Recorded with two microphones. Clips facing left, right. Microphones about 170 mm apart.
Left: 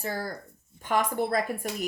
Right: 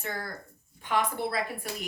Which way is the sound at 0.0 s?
35° left (ahead or behind).